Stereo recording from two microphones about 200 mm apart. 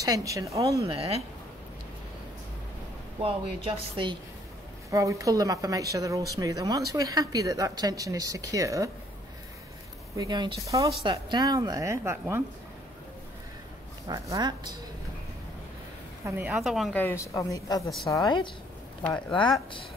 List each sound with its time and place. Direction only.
0.0 s speech: 15° right (ahead or behind)
0.8 s speech: 30° right (ahead or behind)
3.2 s speech: 30° right (ahead or behind)
10.1 s speech: 20° right (ahead or behind)
14.0 s speech: 20° right (ahead or behind)
16.3 s a woman's voice: 10° right (ahead or behind); by 17.8 s 15° left (ahead or behind)
17.8 s a woman's voice: centre (ahead or behind)
18.1 s a woman's voice: 20° left (ahead or behind)